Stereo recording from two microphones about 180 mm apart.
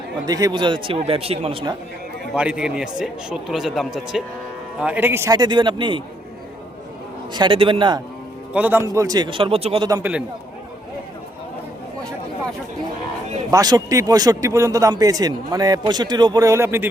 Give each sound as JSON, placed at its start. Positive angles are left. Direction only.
{"t": 0.3, "sound": "speech", "side_deg": -20}
{"t": 2.3, "sound": "a man's voice", "side_deg": -5}
{"t": 7.3, "sound": "speech", "side_deg": -25}
{"t": 8.5, "sound": "speech", "side_deg": -10}
{"t": 10.0, "sound": "a man's voice", "side_deg": -5}
{"t": 13.5, "sound": "speech", "side_deg": -20}